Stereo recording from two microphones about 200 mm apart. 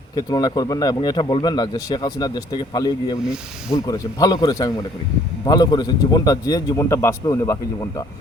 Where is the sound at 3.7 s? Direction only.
15° left (ahead or behind).